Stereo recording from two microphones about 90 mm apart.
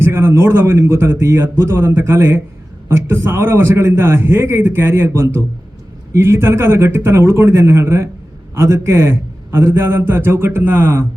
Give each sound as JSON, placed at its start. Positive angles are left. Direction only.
{"t": 0.0, "sound": "a man's voice", "side_deg": -25}